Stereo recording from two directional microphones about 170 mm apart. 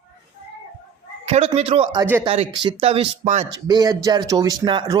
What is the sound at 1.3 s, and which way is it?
Speech, 35° right (ahead or behind).